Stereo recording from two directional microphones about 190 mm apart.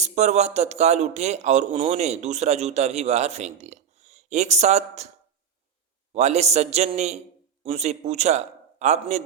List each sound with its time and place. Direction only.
0.0 s speech: 35° right (ahead or behind)
6.1 s a man's voice: 35° right (ahead or behind)